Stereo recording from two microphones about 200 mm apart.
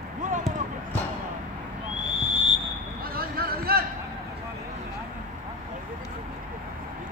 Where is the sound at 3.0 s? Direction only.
50° right (ahead or behind).